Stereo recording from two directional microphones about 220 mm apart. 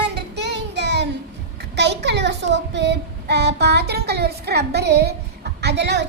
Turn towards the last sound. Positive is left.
turn(degrees=-50)  # may be behind; listen again after turning